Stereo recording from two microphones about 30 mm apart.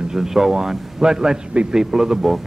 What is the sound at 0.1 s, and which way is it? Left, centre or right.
A man's voice, centre.